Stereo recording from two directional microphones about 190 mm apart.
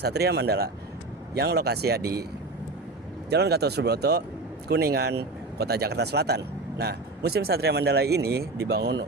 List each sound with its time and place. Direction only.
0.0 s speech: 60° right (ahead or behind)
3.2 s speech: 60° right (ahead or behind)